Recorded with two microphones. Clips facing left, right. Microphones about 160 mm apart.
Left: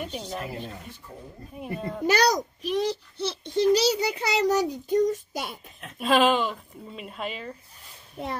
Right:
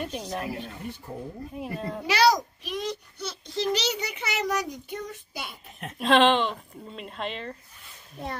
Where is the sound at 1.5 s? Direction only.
Centre (ahead or behind).